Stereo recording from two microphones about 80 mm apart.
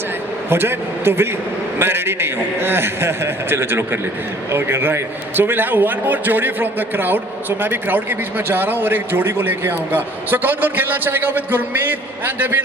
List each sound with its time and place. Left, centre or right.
0.5 s a man's voice: right